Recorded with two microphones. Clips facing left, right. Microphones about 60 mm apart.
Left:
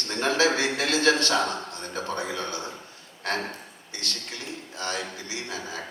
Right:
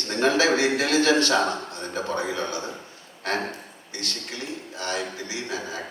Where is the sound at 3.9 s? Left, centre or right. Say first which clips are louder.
Right 1 dB; right.